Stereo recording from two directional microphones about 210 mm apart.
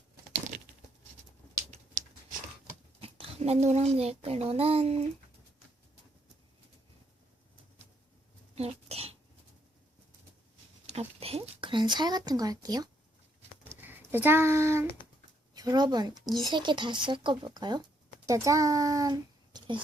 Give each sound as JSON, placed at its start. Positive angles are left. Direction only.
{"t": 3.0, "sound": "speech", "side_deg": -30}
{"t": 8.5, "sound": "cough", "side_deg": -30}
{"t": 11.2, "sound": "speech", "side_deg": -30}
{"t": 13.7, "sound": "a sound", "side_deg": -10}
{"t": 15.5, "sound": "a child's voice", "side_deg": -20}